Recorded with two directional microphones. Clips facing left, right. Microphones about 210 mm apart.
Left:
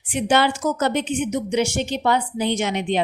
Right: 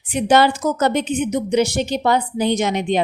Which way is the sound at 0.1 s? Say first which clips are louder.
Right 4 dB; 40° right (ahead or behind).